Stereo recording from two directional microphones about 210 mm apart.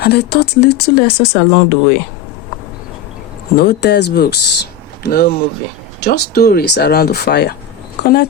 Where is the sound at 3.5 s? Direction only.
50° left (ahead or behind).